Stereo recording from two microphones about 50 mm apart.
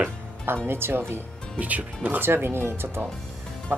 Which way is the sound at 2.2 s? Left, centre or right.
Right.